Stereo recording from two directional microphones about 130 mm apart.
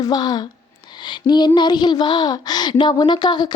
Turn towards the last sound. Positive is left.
turn(degrees=35)  # may be behind; listen again after turning